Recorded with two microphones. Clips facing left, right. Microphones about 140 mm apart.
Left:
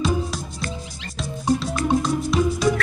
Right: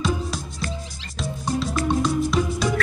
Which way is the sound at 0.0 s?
Centre (ahead or behind).